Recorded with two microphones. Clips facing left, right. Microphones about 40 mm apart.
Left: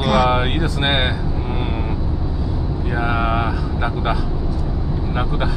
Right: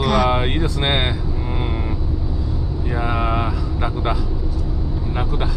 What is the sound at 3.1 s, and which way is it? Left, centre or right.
Vehicle, left.